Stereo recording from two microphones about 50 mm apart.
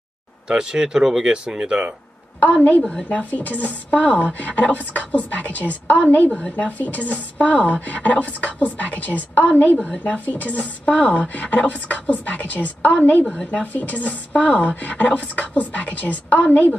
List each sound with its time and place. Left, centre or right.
0.5 s speech: centre
2.8 s speech: centre
3.3 s a woman's voice: left
10.9 s speech: left
13.2 s speech: centre
13.5 s speech: left
14.8 s a woman's voice: left